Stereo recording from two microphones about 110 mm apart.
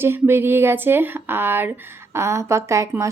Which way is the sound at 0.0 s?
20° right (ahead or behind).